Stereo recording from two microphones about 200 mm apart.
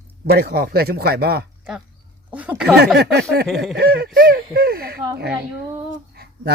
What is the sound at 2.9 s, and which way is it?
Speech, 55° right (ahead or behind).